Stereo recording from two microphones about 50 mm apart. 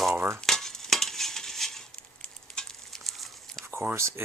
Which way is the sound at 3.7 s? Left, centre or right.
Right.